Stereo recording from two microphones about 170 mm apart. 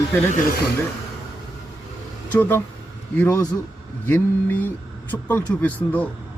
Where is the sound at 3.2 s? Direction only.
15° left (ahead or behind).